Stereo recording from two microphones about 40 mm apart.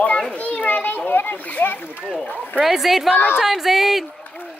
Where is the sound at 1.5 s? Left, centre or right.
Left.